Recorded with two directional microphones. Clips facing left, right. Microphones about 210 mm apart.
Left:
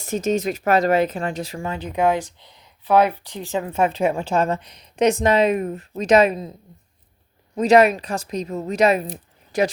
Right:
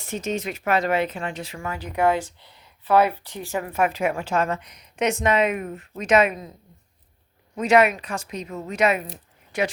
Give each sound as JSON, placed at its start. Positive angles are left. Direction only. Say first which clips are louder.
{"t": 0.0, "sound": "speech", "louder": "left 6 dB", "side_deg": 40}
{"t": 1.6, "sound": "speech", "louder": "left 1 dB", "side_deg": 25}
{"t": 7.5, "sound": "speech", "louder": "left 4 dB", "side_deg": 35}